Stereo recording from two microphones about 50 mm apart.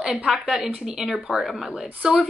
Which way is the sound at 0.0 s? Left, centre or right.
Centre.